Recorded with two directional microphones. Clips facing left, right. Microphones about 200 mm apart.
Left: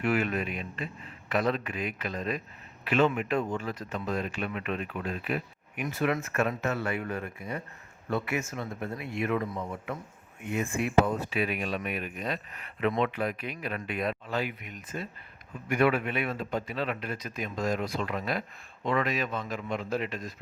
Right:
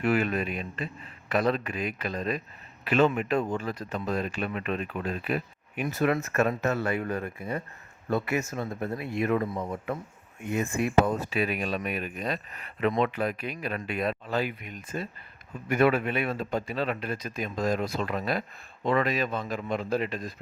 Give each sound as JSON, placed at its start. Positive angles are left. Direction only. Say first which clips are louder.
{"t": 0.0, "sound": "speech", "louder": "right 2 dB", "side_deg": -35}
{"t": 10.5, "sound": "speech", "louder": "right 1 dB", "side_deg": -40}